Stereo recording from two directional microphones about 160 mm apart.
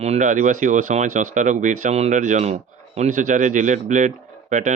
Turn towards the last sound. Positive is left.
turn(degrees=-50)  # may be behind; listen again after turning